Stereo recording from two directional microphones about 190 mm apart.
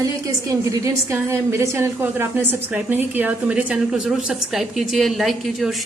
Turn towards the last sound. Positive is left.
turn(degrees=0)  # may be behind; listen again after turning